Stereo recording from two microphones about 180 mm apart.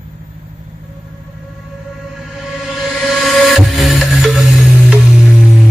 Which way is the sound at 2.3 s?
Centre (ahead or behind).